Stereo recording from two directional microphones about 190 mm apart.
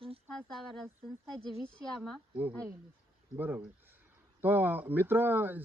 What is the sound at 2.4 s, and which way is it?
Speech, 10° right (ahead or behind).